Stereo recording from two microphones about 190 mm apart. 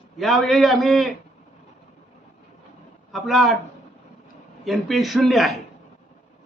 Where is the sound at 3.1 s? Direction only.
Centre (ahead or behind).